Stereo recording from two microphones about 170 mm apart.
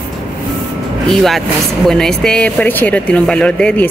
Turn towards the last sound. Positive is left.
turn(degrees=10)  # may be behind; listen again after turning